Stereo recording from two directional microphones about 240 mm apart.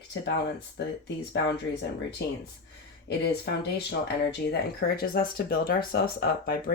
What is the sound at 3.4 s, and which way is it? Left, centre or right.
Speech, left.